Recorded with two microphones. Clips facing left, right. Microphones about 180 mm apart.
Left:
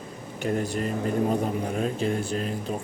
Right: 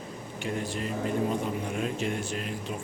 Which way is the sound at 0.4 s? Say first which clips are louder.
Left 6 dB; 45° left (ahead or behind).